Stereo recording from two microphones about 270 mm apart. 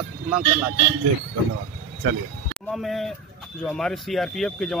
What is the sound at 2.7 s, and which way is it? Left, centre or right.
Speech, centre.